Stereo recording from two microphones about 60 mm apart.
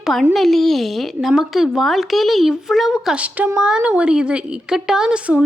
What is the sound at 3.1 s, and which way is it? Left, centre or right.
A woman's voice, right.